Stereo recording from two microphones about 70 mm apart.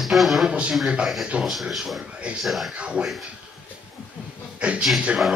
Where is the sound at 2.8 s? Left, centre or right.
Centre.